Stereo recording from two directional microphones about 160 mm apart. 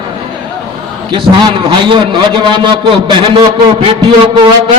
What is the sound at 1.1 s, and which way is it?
A man's voice, 30° right (ahead or behind).